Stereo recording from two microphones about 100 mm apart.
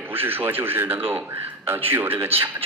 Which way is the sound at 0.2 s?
20° right (ahead or behind).